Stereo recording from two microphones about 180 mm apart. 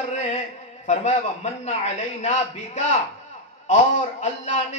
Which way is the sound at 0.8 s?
40° left (ahead or behind).